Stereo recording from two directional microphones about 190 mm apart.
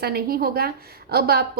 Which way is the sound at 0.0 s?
55° right (ahead or behind).